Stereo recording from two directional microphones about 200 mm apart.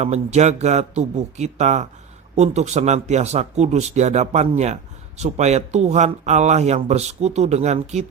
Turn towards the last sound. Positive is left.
turn(degrees=-35)  # may be behind; listen again after turning